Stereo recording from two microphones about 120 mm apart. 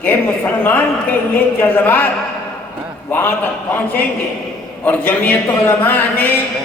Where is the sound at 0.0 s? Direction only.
15° left (ahead or behind).